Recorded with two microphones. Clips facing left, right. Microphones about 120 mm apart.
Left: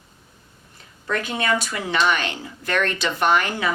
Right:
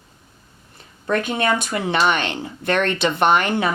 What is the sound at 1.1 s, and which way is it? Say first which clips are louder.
Speech: right 3 dB; 55° right (ahead or behind).